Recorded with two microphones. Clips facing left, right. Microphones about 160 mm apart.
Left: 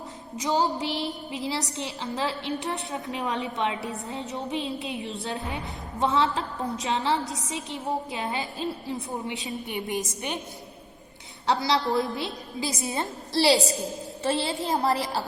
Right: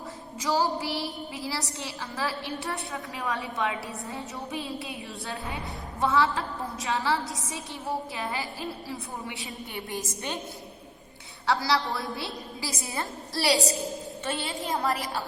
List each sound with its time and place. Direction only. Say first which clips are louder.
0.3 s a woman's voice: left 1 dB; 20° left (ahead or behind)
11.4 s a woman's voice: left 2 dB; 20° left (ahead or behind)